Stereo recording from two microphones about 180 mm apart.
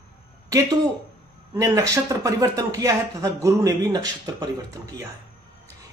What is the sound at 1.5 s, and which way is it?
Speech, 15° right (ahead or behind).